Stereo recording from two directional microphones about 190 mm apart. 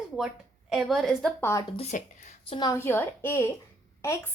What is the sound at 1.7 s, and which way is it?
Speech, 35° left (ahead or behind).